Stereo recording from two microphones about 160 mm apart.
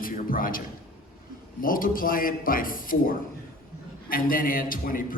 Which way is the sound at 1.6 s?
60° left (ahead or behind).